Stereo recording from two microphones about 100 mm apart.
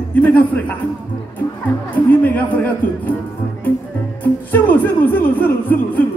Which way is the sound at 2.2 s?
15° left (ahead or behind).